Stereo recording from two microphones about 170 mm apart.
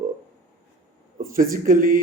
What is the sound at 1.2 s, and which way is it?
Speech, 55° right (ahead or behind).